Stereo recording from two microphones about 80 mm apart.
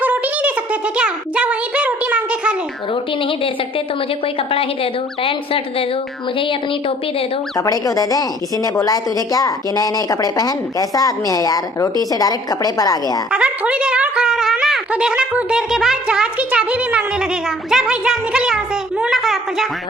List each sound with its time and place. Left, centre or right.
0.0 s a sound: centre
2.9 s a woman's voice: left
7.6 s a woman's voice: left
13.3 s speech: centre